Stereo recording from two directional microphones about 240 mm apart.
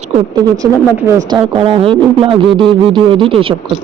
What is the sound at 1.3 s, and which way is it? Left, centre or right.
Speech, centre.